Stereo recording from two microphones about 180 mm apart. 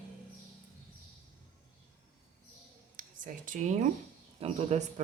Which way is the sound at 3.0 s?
50° right (ahead or behind).